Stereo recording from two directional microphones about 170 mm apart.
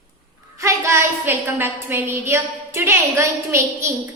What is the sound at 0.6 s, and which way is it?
A woman's voice, 15° right (ahead or behind).